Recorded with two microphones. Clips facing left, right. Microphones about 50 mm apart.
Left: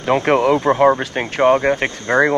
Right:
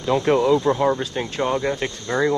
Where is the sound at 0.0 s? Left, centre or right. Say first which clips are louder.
Left 3 dB; left.